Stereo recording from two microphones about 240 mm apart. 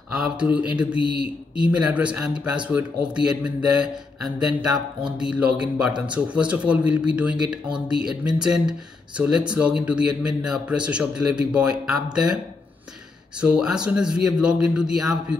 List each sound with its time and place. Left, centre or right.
0.1 s speech: centre
0.9 s speech: centre
1.6 s a man's voice: centre
13.4 s a man's voice: centre